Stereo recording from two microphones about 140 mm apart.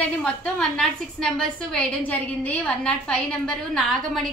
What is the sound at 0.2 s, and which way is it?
A woman's voice, 5° left (ahead or behind).